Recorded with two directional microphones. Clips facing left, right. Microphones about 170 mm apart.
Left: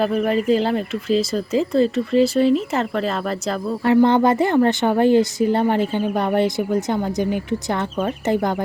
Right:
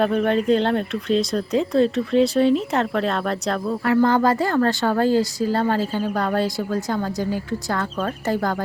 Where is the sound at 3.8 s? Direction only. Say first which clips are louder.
Left 3 dB; 20° left (ahead or behind).